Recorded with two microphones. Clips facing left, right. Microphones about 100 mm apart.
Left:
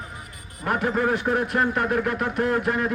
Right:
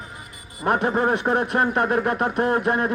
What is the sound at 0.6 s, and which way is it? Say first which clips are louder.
Speech: right 3 dB; 25° right (ahead or behind).